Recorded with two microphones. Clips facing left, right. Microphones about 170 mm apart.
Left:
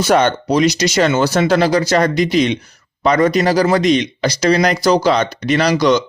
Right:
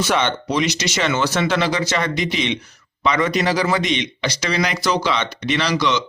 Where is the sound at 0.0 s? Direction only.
40° left (ahead or behind).